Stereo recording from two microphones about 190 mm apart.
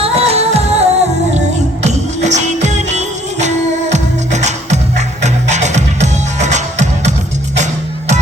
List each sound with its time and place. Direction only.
0.0 s music: 30° right (ahead or behind)